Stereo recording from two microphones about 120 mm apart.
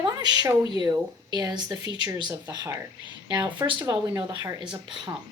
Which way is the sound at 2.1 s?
40° right (ahead or behind).